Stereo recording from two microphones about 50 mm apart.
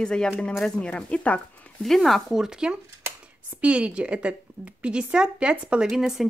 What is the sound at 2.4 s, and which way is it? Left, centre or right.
Speech, centre.